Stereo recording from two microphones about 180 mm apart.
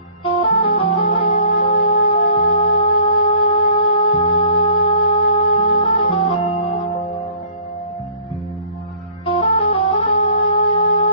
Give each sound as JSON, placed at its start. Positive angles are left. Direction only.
{"t": 0.2, "sound": "organ", "side_deg": 30}
{"t": 1.1, "sound": "music", "side_deg": 30}
{"t": 9.2, "sound": "music", "side_deg": 30}